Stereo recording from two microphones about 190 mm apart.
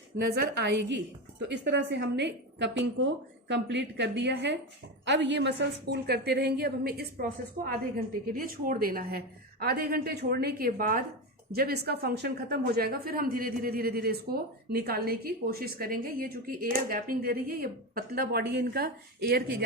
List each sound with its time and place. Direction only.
0.2 s a woman's voice: 65° right (ahead or behind)